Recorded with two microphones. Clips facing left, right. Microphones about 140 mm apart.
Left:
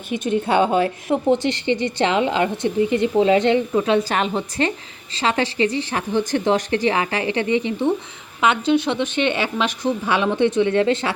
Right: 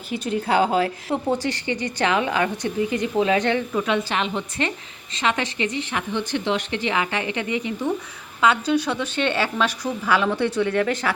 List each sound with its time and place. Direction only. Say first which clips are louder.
0.1 s a woman's voice: left 3 dB; 25° left (ahead or behind)
4.1 s a woman's voice: left 3 dB; 40° left (ahead or behind); by 11.1 s 25° left (ahead or behind)